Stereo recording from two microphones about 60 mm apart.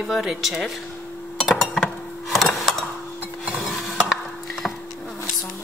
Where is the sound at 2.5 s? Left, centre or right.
Centre.